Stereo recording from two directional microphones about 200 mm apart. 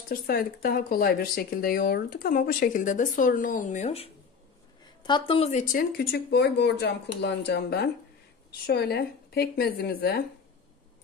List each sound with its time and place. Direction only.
0.1 s speech: 50° left (ahead or behind)